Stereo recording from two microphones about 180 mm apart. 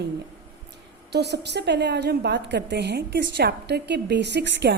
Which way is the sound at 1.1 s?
70° right (ahead or behind).